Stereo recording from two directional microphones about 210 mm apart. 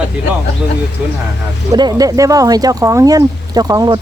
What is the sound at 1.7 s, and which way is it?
Speech, 20° right (ahead or behind).